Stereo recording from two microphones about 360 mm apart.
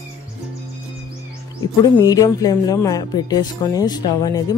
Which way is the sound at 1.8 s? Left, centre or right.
Centre.